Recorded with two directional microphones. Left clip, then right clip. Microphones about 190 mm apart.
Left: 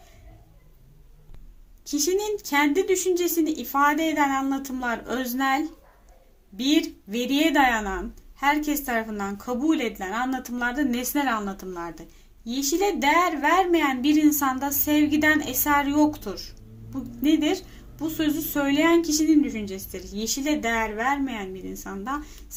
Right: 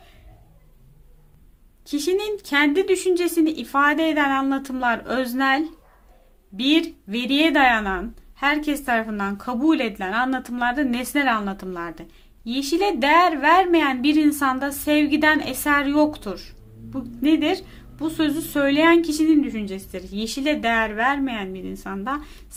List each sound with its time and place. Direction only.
1.9 s a woman's voice: 20° right (ahead or behind)
6.6 s a woman's voice: 20° right (ahead or behind)